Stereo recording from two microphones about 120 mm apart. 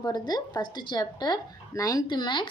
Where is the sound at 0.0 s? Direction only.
35° left (ahead or behind).